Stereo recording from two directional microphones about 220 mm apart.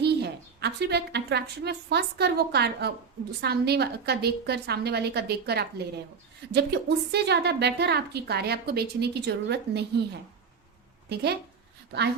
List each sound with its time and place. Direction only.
0.0 s a woman's voice: 50° right (ahead or behind)
11.1 s a woman's voice: 50° right (ahead or behind)